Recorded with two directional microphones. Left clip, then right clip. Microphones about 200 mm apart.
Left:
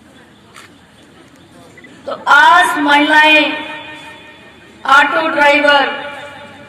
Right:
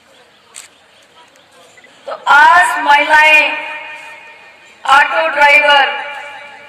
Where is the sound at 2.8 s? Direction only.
25° left (ahead or behind).